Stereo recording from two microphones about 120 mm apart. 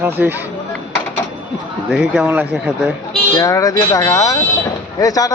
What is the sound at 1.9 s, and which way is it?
Speech, 5° right (ahead or behind).